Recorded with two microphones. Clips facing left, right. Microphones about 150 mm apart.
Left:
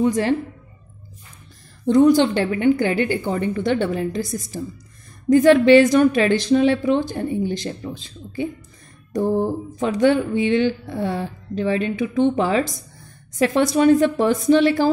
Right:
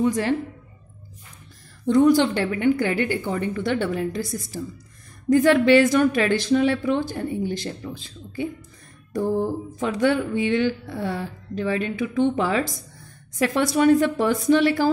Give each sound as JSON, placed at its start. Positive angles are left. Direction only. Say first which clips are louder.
{"t": 0.0, "sound": "speech", "louder": "left 3 dB", "side_deg": 25}
{"t": 1.9, "sound": "speech", "louder": "left 3 dB", "side_deg": 20}